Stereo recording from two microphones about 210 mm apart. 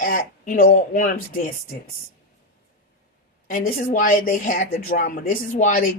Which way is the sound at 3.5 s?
45° left (ahead or behind).